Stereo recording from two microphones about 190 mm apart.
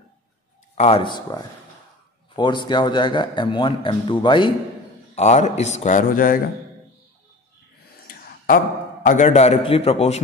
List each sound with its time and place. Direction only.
0.7 s a man's voice: 30° left (ahead or behind)
5.1 s a man's voice: 35° left (ahead or behind)
8.1 s a sound: 50° left (ahead or behind)
9.0 s a man's voice: 40° left (ahead or behind)